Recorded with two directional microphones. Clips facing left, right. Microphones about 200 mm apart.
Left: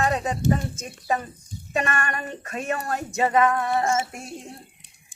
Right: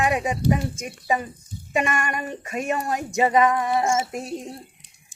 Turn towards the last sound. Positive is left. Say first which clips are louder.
# right 2 dB
turn(degrees=-20)  # may be behind; listen again after turning